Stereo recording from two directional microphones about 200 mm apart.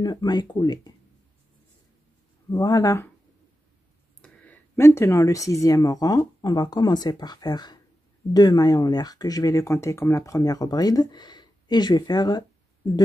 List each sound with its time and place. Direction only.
0.0 s speech: 20° left (ahead or behind)
2.5 s speech: 20° left (ahead or behind)
4.2 s speech: 5° left (ahead or behind)